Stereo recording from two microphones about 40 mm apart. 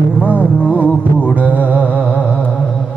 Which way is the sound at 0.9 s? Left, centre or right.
Left.